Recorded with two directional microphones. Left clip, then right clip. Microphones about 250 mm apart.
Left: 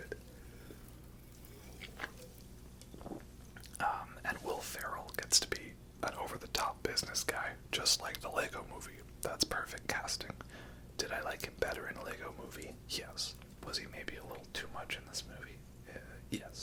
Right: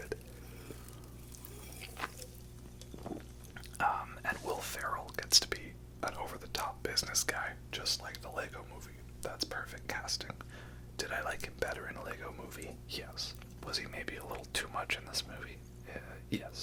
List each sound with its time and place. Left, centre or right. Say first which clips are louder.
3.5 s whispering: right 3 dB; centre
7.7 s speech: left 7 dB; left; by 13.7 s centre
13.7 s speech: right 3 dB; centre